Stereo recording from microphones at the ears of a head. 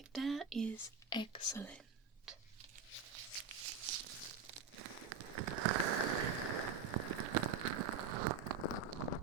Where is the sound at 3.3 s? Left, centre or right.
Right.